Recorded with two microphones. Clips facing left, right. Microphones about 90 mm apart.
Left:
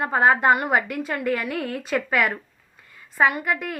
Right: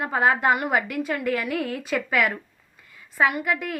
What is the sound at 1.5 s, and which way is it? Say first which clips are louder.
Speech: right 1 dB; centre (ahead or behind).